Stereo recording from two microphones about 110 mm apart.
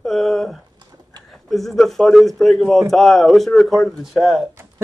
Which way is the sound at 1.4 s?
Centre (ahead or behind).